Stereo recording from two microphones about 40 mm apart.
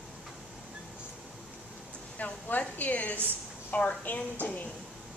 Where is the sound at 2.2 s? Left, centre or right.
Left.